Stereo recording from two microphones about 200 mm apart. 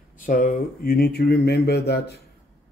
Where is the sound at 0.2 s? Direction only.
45° left (ahead or behind).